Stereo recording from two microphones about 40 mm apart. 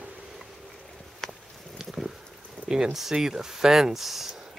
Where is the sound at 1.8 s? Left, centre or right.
Centre.